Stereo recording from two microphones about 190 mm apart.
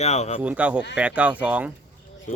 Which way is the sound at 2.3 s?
45° left (ahead or behind).